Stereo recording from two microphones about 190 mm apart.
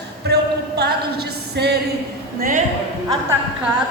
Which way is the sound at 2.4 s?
45° right (ahead or behind).